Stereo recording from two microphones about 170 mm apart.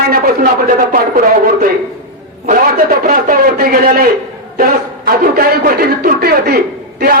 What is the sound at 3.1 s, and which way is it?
A woman's voice, 55° right (ahead or behind).